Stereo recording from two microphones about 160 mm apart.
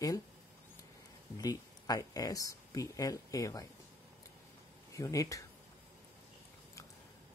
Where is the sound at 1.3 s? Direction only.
20° left (ahead or behind).